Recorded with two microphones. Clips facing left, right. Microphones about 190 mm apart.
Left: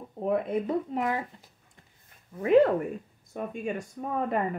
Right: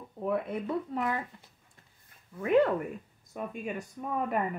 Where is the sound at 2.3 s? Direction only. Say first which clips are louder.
Left 4 dB; 35° left (ahead or behind).